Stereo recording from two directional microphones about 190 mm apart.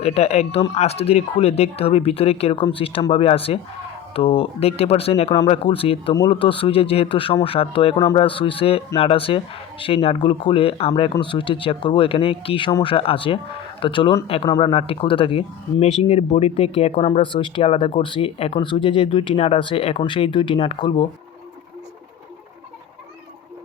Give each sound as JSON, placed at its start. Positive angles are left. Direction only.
{"t": 0.0, "sound": "speech", "side_deg": 35}
{"t": 7.9, "sound": "speech", "side_deg": 20}